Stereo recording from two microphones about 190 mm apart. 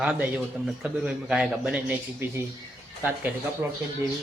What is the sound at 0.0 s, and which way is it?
Speech, 5° right (ahead or behind).